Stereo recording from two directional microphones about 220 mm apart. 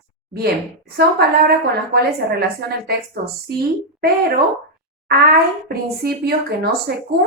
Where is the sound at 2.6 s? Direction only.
50° right (ahead or behind).